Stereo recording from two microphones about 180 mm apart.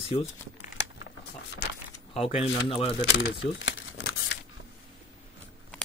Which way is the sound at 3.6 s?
90° left.